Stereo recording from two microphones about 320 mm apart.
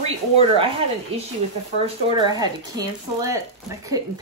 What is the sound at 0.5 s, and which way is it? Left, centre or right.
Speech, centre.